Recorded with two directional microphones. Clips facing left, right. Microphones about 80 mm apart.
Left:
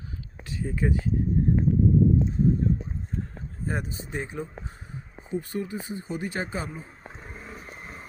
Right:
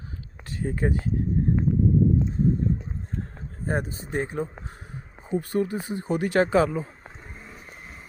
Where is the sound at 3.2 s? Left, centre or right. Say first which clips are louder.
Even; right.